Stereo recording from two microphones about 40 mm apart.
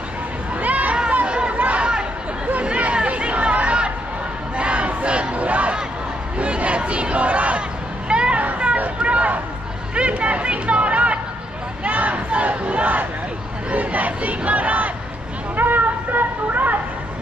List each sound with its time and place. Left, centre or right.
0.6 s a sound: right
1.2 s chatter: right
1.5 s chatter: right
1.8 s chatter: right
4.6 s battle cry: right
6.3 s crowd: right
8.1 s vehicle: right
8.4 s a sound: right
11.8 s battle cry: right
15.5 s a sound: right